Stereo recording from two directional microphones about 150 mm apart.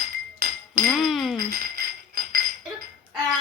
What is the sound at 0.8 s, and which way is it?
Music, centre (ahead or behind).